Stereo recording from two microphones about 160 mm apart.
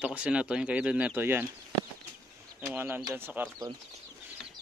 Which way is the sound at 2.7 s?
15° right (ahead or behind).